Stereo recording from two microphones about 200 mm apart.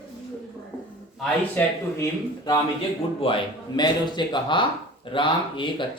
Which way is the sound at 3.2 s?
30° left (ahead or behind).